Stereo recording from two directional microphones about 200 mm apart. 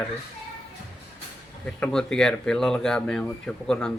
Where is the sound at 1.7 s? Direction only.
5° left (ahead or behind).